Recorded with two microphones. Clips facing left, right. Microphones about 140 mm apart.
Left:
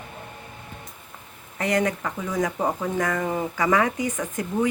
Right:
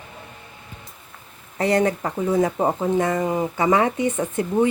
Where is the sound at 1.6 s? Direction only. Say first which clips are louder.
Right 4 dB; 30° right (ahead or behind).